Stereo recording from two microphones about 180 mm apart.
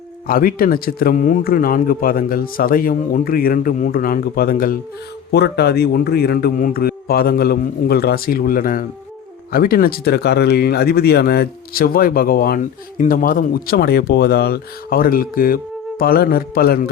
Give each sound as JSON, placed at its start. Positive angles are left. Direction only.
{"t": 0.3, "sound": "speech", "side_deg": 50}
{"t": 5.3, "sound": "speech", "side_deg": 65}